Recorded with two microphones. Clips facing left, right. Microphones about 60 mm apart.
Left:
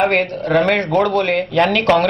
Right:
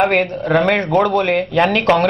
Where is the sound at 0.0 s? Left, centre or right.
Centre.